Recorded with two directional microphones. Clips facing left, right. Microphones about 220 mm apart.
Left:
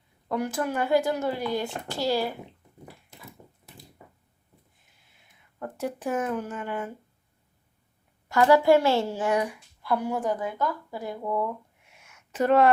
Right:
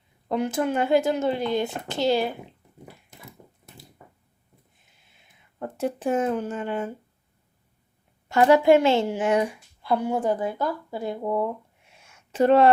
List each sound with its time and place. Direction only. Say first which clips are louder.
0.3 s speech: right 4 dB; 20° right (ahead or behind)
5.1 s speech: right 4 dB; 25° right (ahead or behind)
8.3 s speech: right 2 dB; 20° right (ahead or behind)